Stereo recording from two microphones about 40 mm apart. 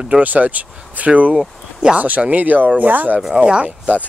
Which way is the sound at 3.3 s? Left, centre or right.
Right.